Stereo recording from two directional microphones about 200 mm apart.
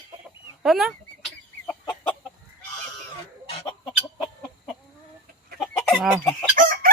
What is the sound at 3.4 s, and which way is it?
Chicken, 30° left (ahead or behind).